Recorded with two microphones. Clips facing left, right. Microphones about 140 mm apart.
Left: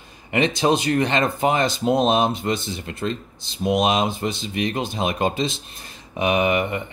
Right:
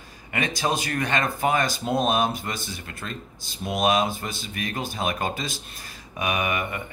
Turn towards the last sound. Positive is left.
turn(degrees=25)  # may be behind; listen again after turning